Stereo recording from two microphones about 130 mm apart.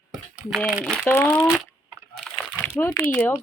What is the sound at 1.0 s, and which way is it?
Speech, 15° left (ahead or behind).